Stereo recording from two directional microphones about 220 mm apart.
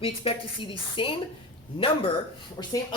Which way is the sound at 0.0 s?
25° left (ahead or behind).